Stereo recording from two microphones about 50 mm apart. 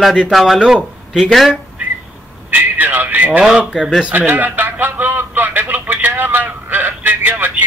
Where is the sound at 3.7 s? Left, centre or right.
Centre.